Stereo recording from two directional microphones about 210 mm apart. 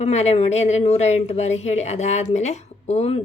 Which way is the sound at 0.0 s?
30° left (ahead or behind).